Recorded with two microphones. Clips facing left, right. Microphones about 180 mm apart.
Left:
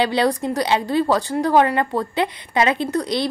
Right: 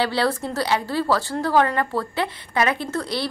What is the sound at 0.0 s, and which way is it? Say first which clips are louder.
A woman's voice: left 3 dB; 20° left (ahead or behind).